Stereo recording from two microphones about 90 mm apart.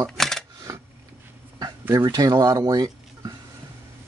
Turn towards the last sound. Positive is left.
turn(degrees=-45)  # may be behind; listen again after turning